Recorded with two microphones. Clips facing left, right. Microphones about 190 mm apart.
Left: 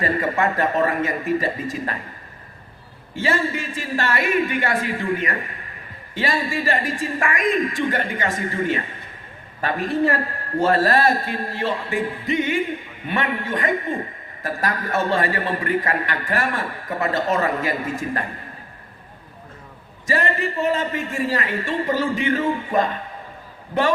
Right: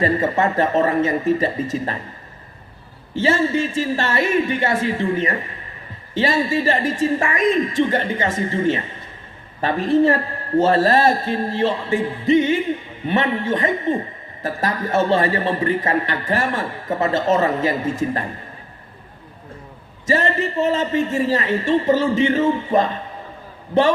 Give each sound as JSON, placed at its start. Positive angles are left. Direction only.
{"t": 0.0, "sound": "a man's voice", "side_deg": -25}
{"t": 3.2, "sound": "a man's voice", "side_deg": -25}
{"t": 20.1, "sound": "a man's voice", "side_deg": -25}